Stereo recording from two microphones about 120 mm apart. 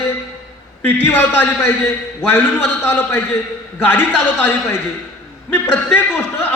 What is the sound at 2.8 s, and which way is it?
A man's voice, 15° left (ahead or behind).